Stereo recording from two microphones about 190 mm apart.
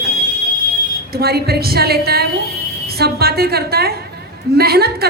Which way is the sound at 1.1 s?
55° right (ahead or behind).